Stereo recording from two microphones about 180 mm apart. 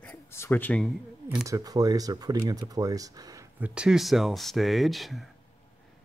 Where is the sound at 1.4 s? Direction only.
20° right (ahead or behind).